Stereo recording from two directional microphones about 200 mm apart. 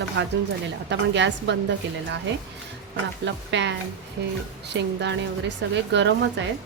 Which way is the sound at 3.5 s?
60° right (ahead or behind).